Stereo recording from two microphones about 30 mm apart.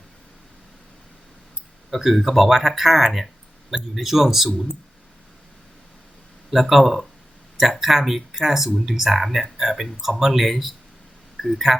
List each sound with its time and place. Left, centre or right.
1.9 s speech: centre
6.5 s speech: centre